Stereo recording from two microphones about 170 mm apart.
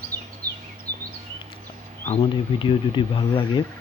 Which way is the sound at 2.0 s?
35° left (ahead or behind).